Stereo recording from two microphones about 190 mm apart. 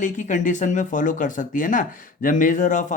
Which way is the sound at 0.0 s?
40° left (ahead or behind).